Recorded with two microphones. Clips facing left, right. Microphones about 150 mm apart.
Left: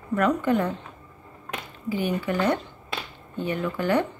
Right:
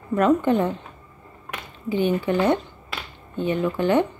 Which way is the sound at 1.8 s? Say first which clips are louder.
Right 5 dB; 25° right (ahead or behind).